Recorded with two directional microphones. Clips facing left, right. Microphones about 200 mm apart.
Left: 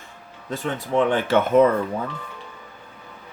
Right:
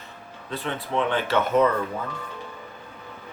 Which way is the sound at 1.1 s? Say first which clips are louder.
Left 4 dB; 50° left (ahead or behind).